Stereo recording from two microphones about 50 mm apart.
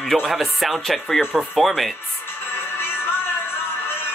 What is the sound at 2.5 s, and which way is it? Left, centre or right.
Music, left.